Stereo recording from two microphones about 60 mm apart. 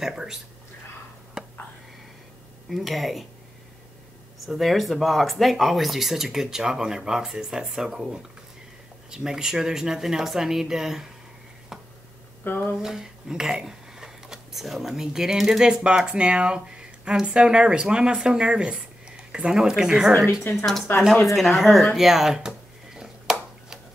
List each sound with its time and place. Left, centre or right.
0.0 s speech: centre
1.4 s a sound: centre
2.7 s speech: centre
4.4 s speech: centre
12.4 s speech: left
12.7 s speech: centre
20.5 s speech: centre
22.9 s a sound: centre